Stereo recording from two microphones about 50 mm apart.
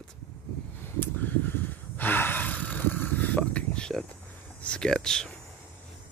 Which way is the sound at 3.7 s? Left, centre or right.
Centre.